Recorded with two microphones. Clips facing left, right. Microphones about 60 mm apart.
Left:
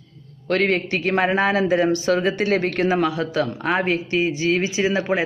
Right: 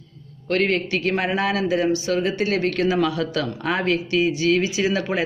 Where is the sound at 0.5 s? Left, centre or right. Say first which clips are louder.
Left 1 dB; left.